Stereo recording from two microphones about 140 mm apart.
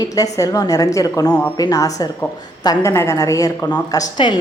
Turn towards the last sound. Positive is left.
turn(degrees=35)  # may be behind; listen again after turning